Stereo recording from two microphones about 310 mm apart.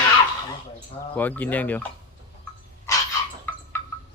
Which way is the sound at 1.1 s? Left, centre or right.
Centre.